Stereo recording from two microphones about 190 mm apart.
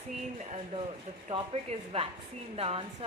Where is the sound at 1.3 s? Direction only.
30° right (ahead or behind).